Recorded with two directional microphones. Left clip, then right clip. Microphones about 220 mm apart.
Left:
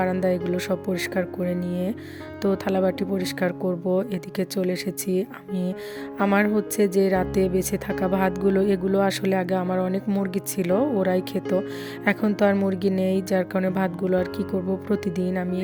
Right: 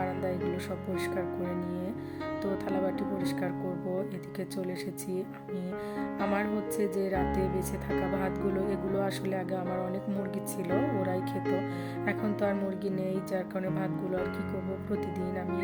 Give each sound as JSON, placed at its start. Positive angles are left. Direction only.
{"t": 0.0, "sound": "speech", "side_deg": 45}